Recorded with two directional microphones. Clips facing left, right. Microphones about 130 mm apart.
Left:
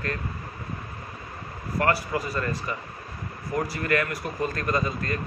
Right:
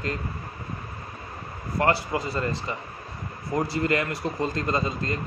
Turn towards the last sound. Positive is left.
turn(degrees=-25)  # may be behind; listen again after turning